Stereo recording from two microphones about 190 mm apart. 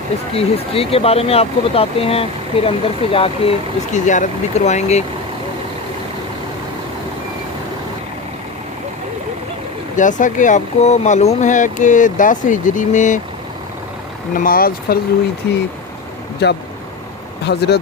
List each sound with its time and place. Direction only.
0.3 s speech: 30° left (ahead or behind)
3.9 s speech: 40° left (ahead or behind)
9.9 s speech: 40° left (ahead or behind)
14.3 s speech: 50° left (ahead or behind)
16.4 s speech: 60° left (ahead or behind)